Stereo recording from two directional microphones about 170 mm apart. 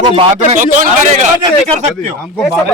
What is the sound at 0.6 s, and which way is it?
Speech, 50° right (ahead or behind).